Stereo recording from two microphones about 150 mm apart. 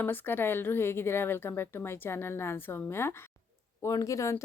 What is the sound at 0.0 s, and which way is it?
A woman's voice, 15° left (ahead or behind).